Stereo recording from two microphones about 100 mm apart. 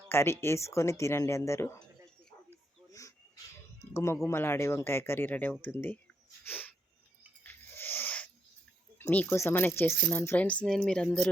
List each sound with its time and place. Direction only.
0.1 s speech: 25° left (ahead or behind)
3.9 s speech: 25° left (ahead or behind)
6.4 s a sound: 20° left (ahead or behind)
7.4 s owl: 20° left (ahead or behind)
9.0 s a sound: 15° left (ahead or behind)
9.2 s speech: 25° left (ahead or behind)
10.4 s speech: 10° left (ahead or behind)